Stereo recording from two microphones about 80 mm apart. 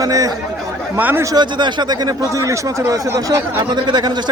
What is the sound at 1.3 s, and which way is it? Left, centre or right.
Speech, right.